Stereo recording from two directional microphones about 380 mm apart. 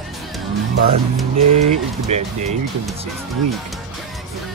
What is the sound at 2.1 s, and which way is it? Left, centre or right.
Speech, centre.